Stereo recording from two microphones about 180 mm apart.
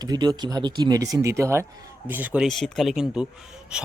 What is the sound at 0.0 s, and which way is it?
A man's voice, 20° right (ahead or behind).